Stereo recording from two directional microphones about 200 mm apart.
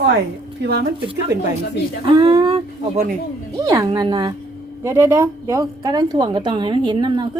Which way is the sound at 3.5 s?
15° right (ahead or behind).